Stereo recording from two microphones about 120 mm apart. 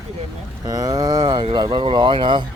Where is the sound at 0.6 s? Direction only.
30° right (ahead or behind).